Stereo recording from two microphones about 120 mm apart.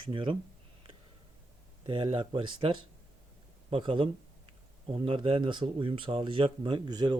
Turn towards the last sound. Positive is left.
turn(degrees=-35)  # may be behind; listen again after turning